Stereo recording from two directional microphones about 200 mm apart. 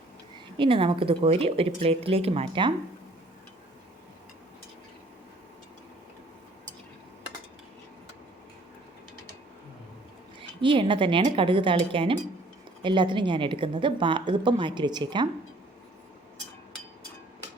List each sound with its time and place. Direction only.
0.6 s a woman's voice: 25° right (ahead or behind)
10.6 s a woman's voice: 25° right (ahead or behind)